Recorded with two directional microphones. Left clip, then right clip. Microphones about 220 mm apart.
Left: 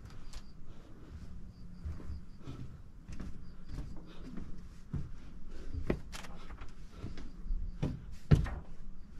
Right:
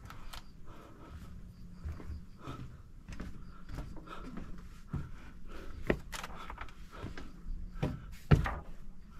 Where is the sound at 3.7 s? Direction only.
Centre (ahead or behind).